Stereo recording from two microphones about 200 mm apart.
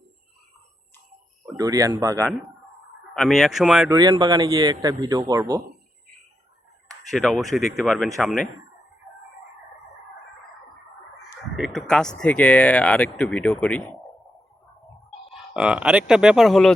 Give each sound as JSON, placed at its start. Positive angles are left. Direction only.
{"t": 1.5, "sound": "speech", "side_deg": -15}
{"t": 3.2, "sound": "speech", "side_deg": 0}
{"t": 3.8, "sound": "speech", "side_deg": -20}
{"t": 7.1, "sound": "speech", "side_deg": 0}
{"t": 11.5, "sound": "speech", "side_deg": 0}
{"t": 15.3, "sound": "speech", "side_deg": -5}